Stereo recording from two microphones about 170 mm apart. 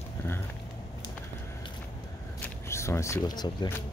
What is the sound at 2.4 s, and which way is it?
Single-lens reflex camera, 15° left (ahead or behind).